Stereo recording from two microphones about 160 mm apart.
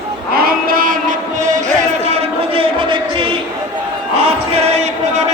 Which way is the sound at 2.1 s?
35° right (ahead or behind).